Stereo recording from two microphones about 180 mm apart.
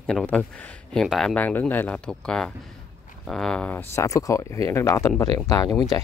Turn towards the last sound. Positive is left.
turn(degrees=20)  # may be behind; listen again after turning